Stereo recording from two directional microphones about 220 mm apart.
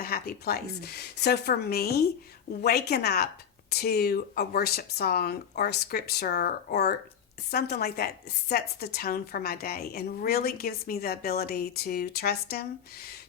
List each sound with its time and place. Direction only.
0.0 s speech: 45° left (ahead or behind)